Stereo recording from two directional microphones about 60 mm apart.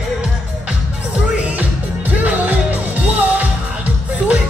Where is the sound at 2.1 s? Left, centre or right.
Right.